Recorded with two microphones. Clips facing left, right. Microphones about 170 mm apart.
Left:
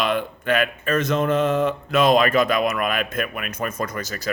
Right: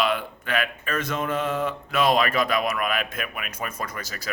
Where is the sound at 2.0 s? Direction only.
50° left (ahead or behind).